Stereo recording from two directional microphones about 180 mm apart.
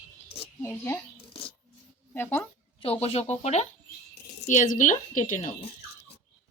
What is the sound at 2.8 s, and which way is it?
A woman's voice, 35° left (ahead or behind).